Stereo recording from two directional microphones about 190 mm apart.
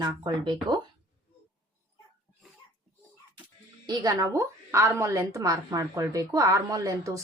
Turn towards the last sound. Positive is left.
turn(degrees=-15)  # may be behind; listen again after turning